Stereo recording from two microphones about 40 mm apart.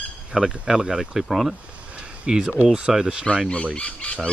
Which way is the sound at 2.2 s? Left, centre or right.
Right.